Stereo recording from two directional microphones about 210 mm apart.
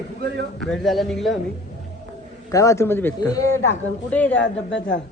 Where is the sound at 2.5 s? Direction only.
15° left (ahead or behind).